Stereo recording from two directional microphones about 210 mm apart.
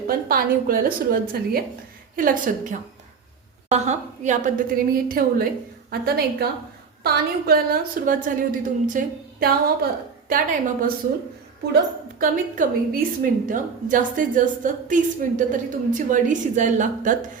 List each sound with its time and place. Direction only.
0.3 s a woman's voice: 45° right (ahead or behind)
12.2 s a woman's voice: 40° right (ahead or behind)